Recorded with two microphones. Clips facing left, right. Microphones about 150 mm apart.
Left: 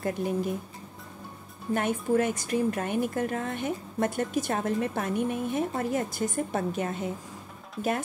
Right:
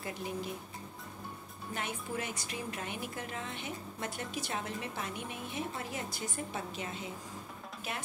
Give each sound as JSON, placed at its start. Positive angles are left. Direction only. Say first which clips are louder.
{"t": 0.0, "sound": "a woman's voice", "louder": "left 10 dB", "side_deg": 50}
{"t": 1.7, "sound": "a woman's voice", "louder": "left 13 dB", "side_deg": 50}